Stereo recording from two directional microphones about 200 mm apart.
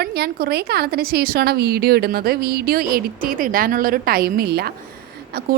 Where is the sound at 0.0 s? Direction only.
50° right (ahead or behind).